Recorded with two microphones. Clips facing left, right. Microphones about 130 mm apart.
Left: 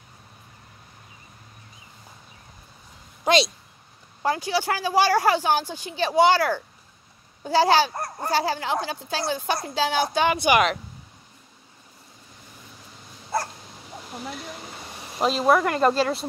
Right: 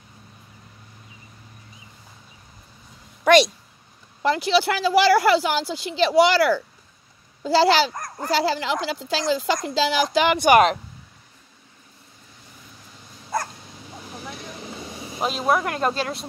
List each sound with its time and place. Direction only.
4.2 s speech: 80° right
10.4 s speech: 40° right (ahead or behind)
15.1 s speech: 5° right (ahead or behind)